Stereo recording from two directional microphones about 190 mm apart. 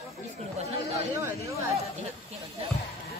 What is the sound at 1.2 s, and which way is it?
Speech, 15° right (ahead or behind).